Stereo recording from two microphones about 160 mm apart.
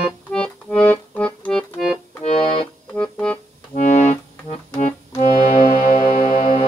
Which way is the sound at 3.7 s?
45° left (ahead or behind).